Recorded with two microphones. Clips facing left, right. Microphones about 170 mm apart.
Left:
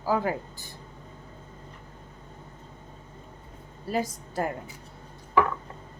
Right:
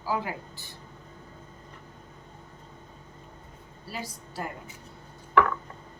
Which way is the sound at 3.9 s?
50° left (ahead or behind).